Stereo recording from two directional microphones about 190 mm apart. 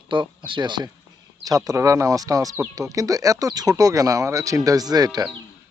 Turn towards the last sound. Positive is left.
turn(degrees=-20)  # may be behind; listen again after turning